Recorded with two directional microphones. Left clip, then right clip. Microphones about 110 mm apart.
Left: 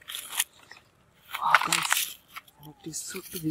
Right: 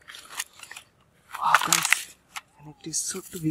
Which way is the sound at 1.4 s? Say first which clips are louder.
Right 2 dB; 20° right (ahead or behind).